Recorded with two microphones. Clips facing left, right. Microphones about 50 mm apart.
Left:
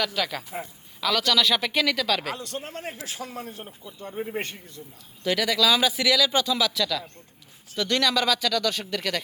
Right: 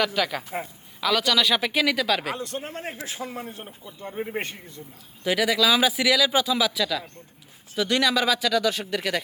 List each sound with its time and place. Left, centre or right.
0.0 s speech: centre
2.3 s a man's voice: right
5.2 s speech: centre